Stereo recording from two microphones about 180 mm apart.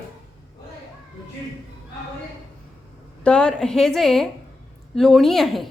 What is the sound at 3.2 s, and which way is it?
A woman's voice, 5° left (ahead or behind).